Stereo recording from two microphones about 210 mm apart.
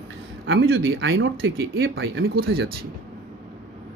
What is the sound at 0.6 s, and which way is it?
Speech, 50° right (ahead or behind).